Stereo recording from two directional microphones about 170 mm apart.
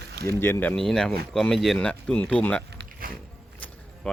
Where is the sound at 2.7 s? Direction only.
60° right (ahead or behind).